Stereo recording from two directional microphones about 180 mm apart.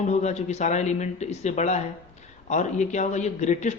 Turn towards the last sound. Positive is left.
turn(degrees=40)  # may be behind; listen again after turning